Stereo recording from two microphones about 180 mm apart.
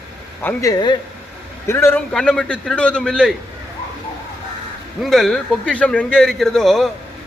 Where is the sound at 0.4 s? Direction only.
20° left (ahead or behind); by 3.3 s 5° left (ahead or behind).